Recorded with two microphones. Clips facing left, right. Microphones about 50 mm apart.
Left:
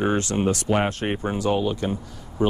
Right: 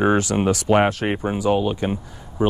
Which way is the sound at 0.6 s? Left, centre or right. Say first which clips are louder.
Right 9 dB; right.